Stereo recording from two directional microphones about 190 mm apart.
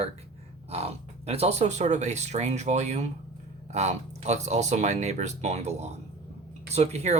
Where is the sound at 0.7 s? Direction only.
35° right (ahead or behind).